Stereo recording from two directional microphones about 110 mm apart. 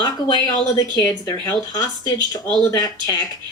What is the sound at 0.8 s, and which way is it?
Speech, 35° left (ahead or behind).